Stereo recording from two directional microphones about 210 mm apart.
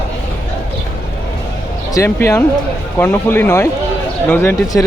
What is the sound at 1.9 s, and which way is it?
Speech, 10° left (ahead or behind).